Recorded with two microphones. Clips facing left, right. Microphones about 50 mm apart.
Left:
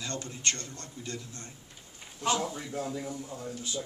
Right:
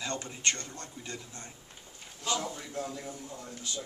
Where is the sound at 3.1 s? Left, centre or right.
Left.